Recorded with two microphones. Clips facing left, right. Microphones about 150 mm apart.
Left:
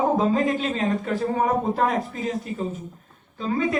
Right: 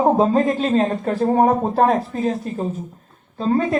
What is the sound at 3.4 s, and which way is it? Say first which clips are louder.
Speech: right 5 dB; 35° right (ahead or behind).